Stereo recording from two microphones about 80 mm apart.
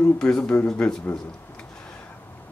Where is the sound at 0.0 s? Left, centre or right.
Centre.